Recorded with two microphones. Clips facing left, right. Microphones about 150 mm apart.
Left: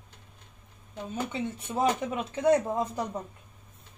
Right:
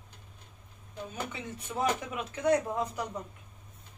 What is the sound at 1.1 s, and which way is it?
Speech, 30° left (ahead or behind).